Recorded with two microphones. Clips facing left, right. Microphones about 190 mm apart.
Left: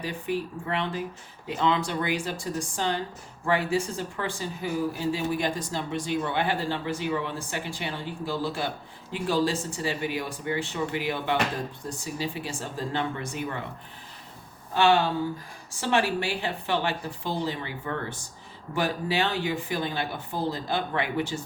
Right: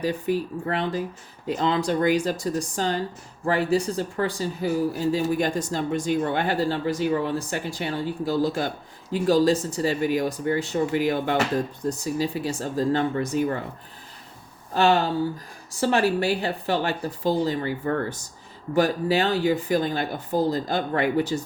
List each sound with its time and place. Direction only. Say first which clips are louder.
0.0 s speech: right 5 dB; 40° right (ahead or behind)
14.7 s speech: right 2 dB; 40° right (ahead or behind)